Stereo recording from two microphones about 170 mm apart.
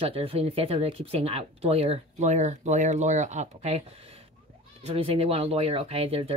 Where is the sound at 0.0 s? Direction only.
35° right (ahead or behind).